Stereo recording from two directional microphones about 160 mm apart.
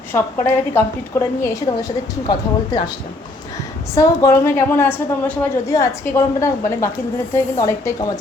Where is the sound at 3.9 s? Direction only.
20° left (ahead or behind).